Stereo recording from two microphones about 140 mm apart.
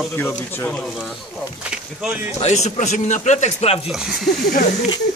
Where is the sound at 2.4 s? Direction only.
55° left (ahead or behind).